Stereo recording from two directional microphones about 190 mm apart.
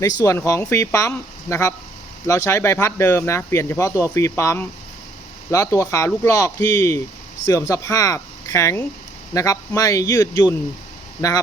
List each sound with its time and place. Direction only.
0.0 s speech: 15° left (ahead or behind)